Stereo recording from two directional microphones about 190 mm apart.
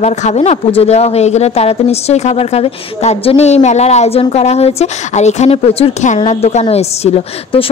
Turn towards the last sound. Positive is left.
turn(degrees=30)  # may be behind; listen again after turning